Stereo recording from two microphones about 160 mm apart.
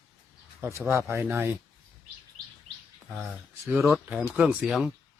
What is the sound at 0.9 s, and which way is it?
Speech, 15° right (ahead or behind).